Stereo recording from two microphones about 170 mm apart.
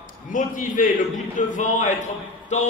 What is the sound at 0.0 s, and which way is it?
A man's voice, 50° left (ahead or behind).